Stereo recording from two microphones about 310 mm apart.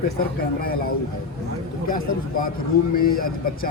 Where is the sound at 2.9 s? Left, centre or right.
Left.